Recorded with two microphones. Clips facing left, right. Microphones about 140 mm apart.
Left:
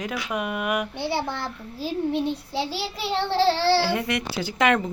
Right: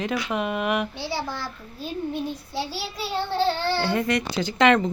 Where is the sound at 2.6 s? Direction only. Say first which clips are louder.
Left 2 dB; 65° left (ahead or behind); by 3.8 s 85° left.